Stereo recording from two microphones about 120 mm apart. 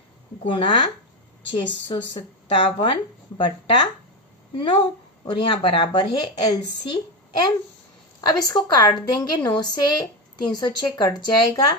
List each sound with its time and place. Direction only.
0.4 s a woman's voice: 40° left (ahead or behind)